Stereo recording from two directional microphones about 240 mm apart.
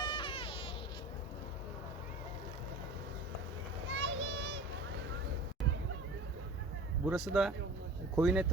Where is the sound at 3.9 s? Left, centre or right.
Right.